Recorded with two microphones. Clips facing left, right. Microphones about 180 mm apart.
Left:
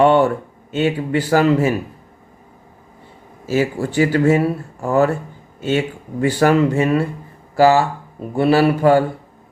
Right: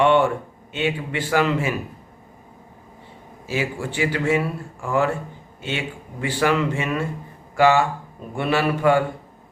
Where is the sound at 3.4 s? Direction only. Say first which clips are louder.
Left 7 dB; 40° left (ahead or behind).